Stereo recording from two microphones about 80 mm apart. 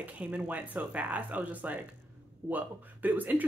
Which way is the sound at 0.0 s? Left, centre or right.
Right.